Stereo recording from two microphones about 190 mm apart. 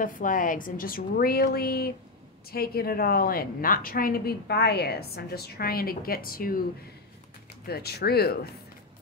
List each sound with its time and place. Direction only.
0.0 s a woman's voice: 45° left (ahead or behind)
7.6 s speech: 55° left (ahead or behind)